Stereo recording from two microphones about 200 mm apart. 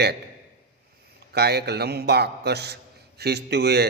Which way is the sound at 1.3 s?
55° right (ahead or behind).